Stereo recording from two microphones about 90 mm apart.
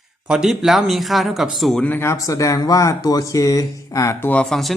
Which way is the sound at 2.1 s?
35° left (ahead or behind).